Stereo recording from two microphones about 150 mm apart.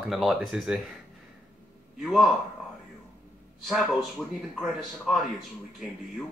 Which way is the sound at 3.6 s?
Centre (ahead or behind).